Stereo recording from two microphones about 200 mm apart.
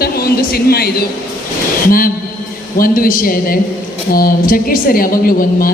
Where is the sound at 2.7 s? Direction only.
45° left (ahead or behind).